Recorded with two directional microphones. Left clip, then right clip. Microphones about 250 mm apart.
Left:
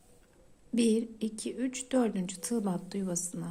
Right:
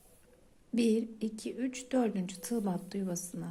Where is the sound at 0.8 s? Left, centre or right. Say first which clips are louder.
Left 2 dB; centre.